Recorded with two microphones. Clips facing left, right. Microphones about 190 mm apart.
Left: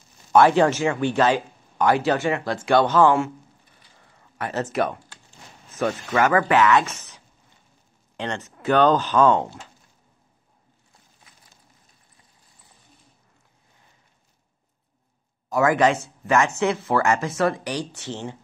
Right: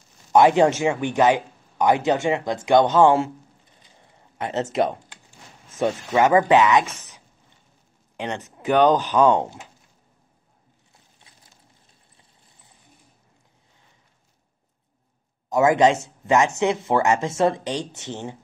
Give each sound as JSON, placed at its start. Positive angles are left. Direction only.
{"t": 0.3, "sound": "speech", "side_deg": -20}
{"t": 3.8, "sound": "a sound", "side_deg": -20}
{"t": 5.8, "sound": "speech", "side_deg": -20}
{"t": 8.2, "sound": "speech", "side_deg": -15}
{"t": 15.5, "sound": "speech", "side_deg": -20}